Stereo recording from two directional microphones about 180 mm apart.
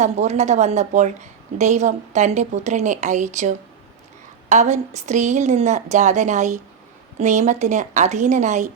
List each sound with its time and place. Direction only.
0.0 s a woman's voice: 40° right (ahead or behind)